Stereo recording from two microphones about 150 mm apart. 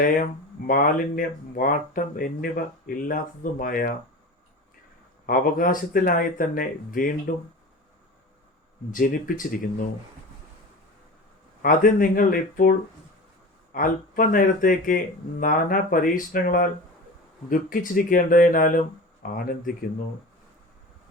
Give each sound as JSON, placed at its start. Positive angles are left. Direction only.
{"t": 0.0, "sound": "speech", "side_deg": 65}
{"t": 5.2, "sound": "speech", "side_deg": 65}
{"t": 8.9, "sound": "speech", "side_deg": 65}
{"t": 11.6, "sound": "speech", "side_deg": 65}
{"t": 13.7, "sound": "speech", "side_deg": 65}